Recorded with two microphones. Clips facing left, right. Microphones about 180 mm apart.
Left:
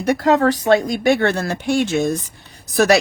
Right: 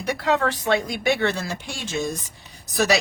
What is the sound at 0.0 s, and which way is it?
A woman's voice, 45° left (ahead or behind).